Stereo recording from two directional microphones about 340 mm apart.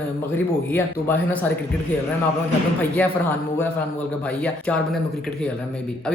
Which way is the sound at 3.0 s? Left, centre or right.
Centre.